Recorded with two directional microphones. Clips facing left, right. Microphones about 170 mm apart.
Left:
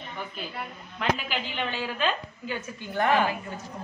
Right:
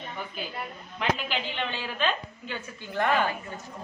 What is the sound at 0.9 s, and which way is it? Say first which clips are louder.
A woman's voice: even; 5° left (ahead or behind).